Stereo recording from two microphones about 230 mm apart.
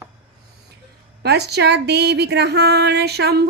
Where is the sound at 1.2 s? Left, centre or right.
Right.